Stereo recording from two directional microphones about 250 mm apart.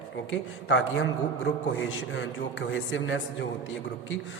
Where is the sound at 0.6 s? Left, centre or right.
Left.